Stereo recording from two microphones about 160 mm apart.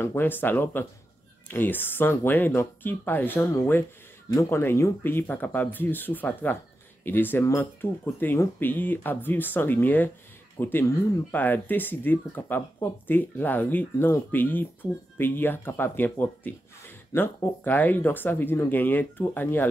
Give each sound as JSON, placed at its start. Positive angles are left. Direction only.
{"t": 0.0, "sound": "speech", "side_deg": 15}